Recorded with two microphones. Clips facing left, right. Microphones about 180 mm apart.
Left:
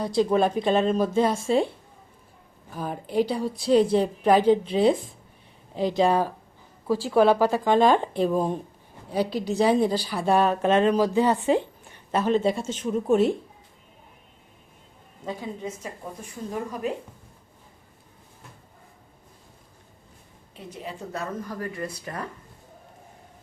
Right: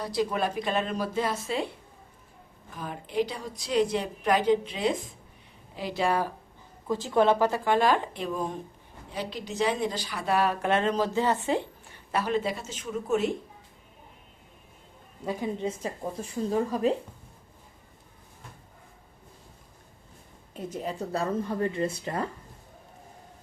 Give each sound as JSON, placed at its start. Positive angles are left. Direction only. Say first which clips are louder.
{"t": 0.0, "sound": "a woman's voice", "louder": "left 6 dB", "side_deg": 25}
{"t": 2.7, "sound": "a woman's voice", "louder": "left 4 dB", "side_deg": 40}
{"t": 5.7, "sound": "speech", "louder": "left 9 dB", "side_deg": -5}
{"t": 7.0, "sound": "a woman's voice", "louder": "left 3 dB", "side_deg": 10}
{"t": 15.2, "sound": "a woman's voice", "louder": "right 2 dB", "side_deg": -10}
{"t": 16.5, "sound": "speech", "louder": "right 4 dB", "side_deg": -30}
{"t": 20.7, "sound": "speech", "louder": "right 4 dB", "side_deg": -35}